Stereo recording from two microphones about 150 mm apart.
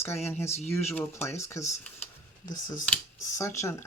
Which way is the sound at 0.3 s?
15° left (ahead or behind).